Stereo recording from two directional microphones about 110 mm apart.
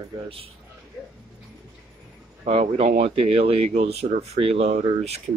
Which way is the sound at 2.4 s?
80° right.